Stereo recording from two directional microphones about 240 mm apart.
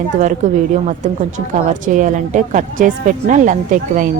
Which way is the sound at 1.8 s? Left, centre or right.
Right.